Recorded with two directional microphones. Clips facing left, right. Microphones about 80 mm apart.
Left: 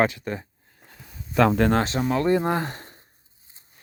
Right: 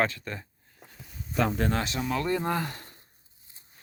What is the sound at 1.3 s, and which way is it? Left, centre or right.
Speech, left.